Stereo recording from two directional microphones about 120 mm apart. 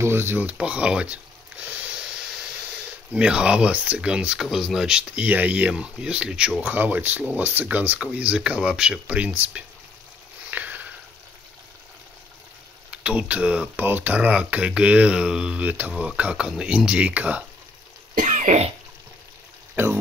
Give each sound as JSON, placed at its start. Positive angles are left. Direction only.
{"t": 0.0, "sound": "speech", "side_deg": -20}
{"t": 3.1, "sound": "speech", "side_deg": -10}
{"t": 10.5, "sound": "sniff", "side_deg": -15}
{"t": 12.9, "sound": "speech", "side_deg": -10}
{"t": 18.1, "sound": "cough", "side_deg": -90}
{"t": 19.7, "sound": "speech", "side_deg": -20}